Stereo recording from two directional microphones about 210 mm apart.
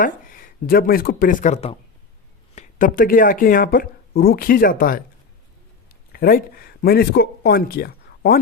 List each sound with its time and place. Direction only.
0.0 s speech: 40° left (ahead or behind)
6.1 s speech: 45° left (ahead or behind)